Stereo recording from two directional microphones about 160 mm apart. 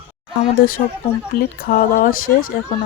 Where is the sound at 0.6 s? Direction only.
65° left (ahead or behind).